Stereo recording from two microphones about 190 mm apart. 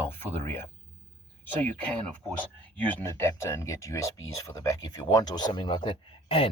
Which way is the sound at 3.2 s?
15° left (ahead or behind).